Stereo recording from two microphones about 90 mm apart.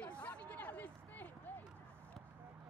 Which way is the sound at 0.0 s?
15° left (ahead or behind).